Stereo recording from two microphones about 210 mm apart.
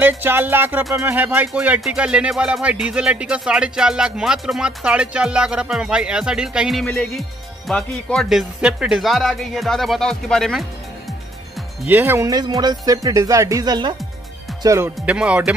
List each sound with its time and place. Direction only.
0.0 s speech: 10° right (ahead or behind)
11.8 s speech: 10° right (ahead or behind)